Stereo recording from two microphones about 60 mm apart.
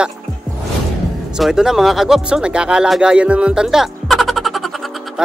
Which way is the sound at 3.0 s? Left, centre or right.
Centre.